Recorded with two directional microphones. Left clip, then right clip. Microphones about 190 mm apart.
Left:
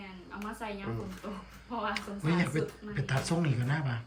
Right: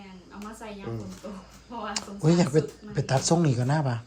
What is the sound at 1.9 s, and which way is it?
Speech, 20° right (ahead or behind).